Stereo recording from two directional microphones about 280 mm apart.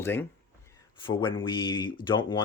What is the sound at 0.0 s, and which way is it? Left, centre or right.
Speech, centre.